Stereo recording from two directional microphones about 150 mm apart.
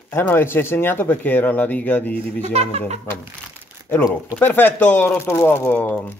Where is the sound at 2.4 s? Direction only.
45° right (ahead or behind).